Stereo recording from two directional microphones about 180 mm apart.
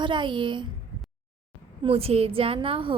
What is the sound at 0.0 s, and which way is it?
Speech, 25° right (ahead or behind).